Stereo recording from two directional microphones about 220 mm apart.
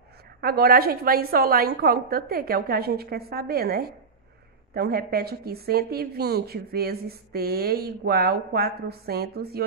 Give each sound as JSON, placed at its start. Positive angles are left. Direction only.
{"t": 0.4, "sound": "speech", "side_deg": -45}